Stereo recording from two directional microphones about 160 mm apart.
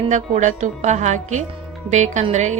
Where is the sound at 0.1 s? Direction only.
50° right (ahead or behind).